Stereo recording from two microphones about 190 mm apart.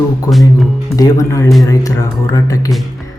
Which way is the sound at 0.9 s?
20° left (ahead or behind).